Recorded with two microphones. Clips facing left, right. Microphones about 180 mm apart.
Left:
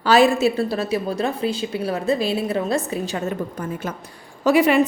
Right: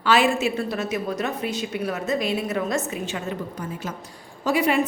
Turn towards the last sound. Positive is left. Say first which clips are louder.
# left 5 dB
turn(degrees=75)  # may be behind; listen again after turning